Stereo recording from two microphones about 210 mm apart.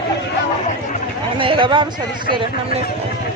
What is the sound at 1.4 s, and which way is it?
Speech, 25° right (ahead or behind).